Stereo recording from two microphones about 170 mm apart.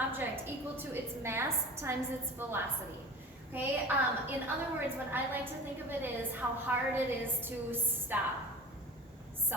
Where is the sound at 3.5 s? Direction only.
10° right (ahead or behind).